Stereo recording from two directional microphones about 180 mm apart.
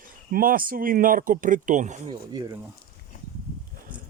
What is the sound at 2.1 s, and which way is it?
Speech, 20° right (ahead or behind).